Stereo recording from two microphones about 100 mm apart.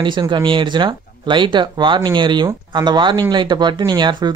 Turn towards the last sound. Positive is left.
turn(degrees=-50)  # may be behind; listen again after turning